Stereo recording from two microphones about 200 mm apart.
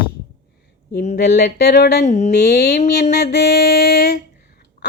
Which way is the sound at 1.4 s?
55° left (ahead or behind).